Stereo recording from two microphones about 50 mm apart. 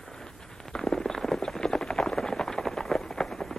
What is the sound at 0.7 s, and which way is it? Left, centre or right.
Clip-clop, centre.